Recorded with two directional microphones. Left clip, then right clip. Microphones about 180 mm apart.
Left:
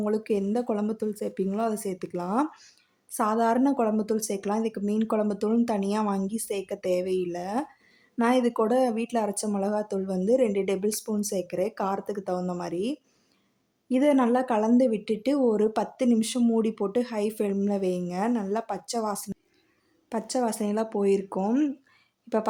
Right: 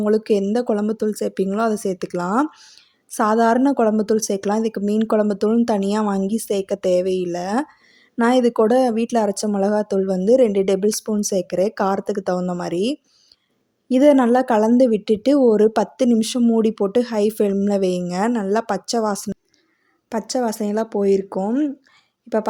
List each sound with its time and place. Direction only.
0.0 s speech: 30° right (ahead or behind)
2.5 s a sound: 20° right (ahead or behind)
3.2 s speech: 35° right (ahead or behind); by 21.7 s 15° right (ahead or behind)